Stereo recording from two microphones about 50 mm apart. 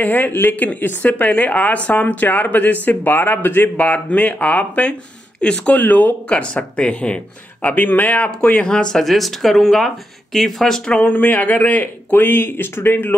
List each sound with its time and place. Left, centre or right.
0.0 s speech: left
6.3 s speech: left
7.6 s speech: left
8.3 s speech: left
9.0 s speech: centre
10.9 s speech: left